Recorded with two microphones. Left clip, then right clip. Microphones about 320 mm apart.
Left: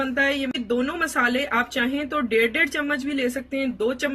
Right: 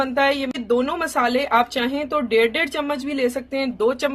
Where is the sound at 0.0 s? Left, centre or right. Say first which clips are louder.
Right 3 dB; centre.